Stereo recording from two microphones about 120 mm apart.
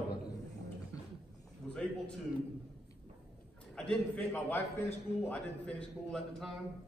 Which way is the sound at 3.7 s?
10° left (ahead or behind).